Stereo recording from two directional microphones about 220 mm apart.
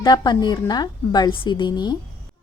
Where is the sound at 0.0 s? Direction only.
20° left (ahead or behind).